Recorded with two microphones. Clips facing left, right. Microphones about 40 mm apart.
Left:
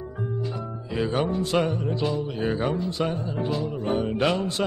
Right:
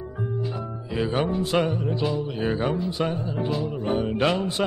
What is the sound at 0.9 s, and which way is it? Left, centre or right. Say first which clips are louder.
Music: even; centre.